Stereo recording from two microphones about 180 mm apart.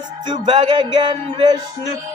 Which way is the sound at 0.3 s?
25° right (ahead or behind).